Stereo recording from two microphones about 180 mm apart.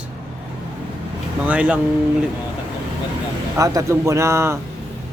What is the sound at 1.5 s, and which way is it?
Speech, 5° right (ahead or behind).